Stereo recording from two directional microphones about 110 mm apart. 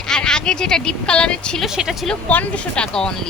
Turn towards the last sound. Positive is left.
turn(degrees=5)  # may be behind; listen again after turning